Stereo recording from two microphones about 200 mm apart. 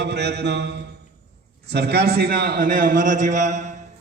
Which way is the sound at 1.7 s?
55° right (ahead or behind).